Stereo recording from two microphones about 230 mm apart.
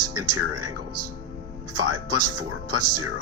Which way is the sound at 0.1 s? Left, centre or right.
Right.